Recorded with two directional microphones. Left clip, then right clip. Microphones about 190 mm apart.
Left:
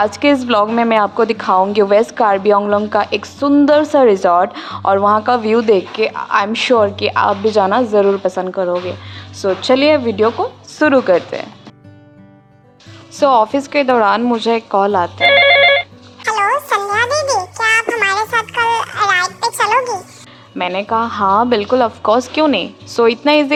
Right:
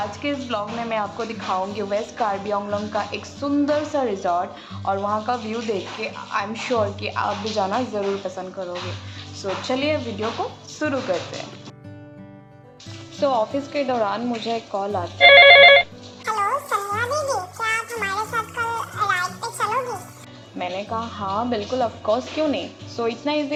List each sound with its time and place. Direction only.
0.0 s a woman's voice: 60° left (ahead or behind)
10.8 s a woman's voice: 50° left (ahead or behind)
13.1 s a woman's voice: 35° left (ahead or behind)
15.2 s telephone bell ringing: centre (ahead or behind)
16.2 s music: 30° left (ahead or behind)
20.6 s a woman's voice: 30° left (ahead or behind)